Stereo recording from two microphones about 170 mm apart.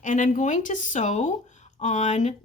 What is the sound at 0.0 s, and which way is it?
Speech, 45° left (ahead or behind).